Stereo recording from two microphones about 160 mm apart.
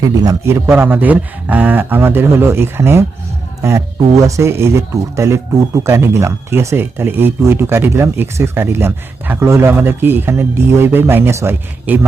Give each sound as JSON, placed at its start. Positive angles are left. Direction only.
{"t": 0.0, "sound": "speech", "side_deg": -20}